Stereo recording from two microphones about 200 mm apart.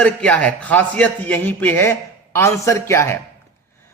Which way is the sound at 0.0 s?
5° left (ahead or behind).